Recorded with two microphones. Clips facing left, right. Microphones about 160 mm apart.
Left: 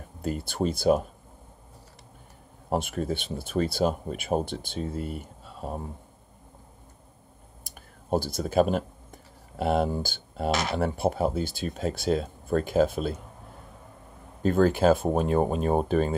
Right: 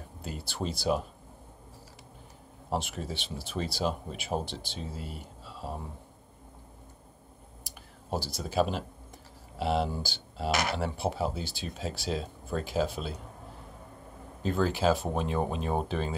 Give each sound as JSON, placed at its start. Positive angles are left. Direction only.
{"t": 0.2, "sound": "speech", "side_deg": 50}
{"t": 2.7, "sound": "speech", "side_deg": 50}
{"t": 7.6, "sound": "speech", "side_deg": 50}
{"t": 14.4, "sound": "speech", "side_deg": 50}